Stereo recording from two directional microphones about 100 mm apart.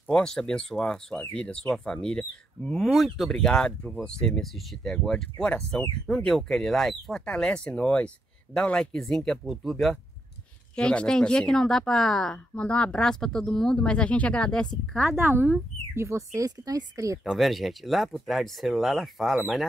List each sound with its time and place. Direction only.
0.1 s speech: 5° left (ahead or behind)
15.0 s speech: 25° right (ahead or behind)
17.2 s speech: centre (ahead or behind)